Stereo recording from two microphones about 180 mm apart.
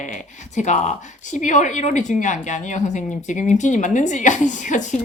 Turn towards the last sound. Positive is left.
turn(degrees=45)  # may be behind; listen again after turning